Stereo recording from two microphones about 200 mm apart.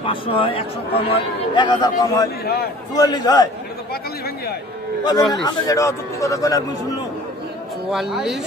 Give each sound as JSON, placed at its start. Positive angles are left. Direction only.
{"t": 0.0, "sound": "speech", "side_deg": 25}
{"t": 2.4, "sound": "a man's voice", "side_deg": 50}
{"t": 2.9, "sound": "speech", "side_deg": 20}
{"t": 5.0, "sound": "a man's voice", "side_deg": 20}
{"t": 7.9, "sound": "speech", "side_deg": 0}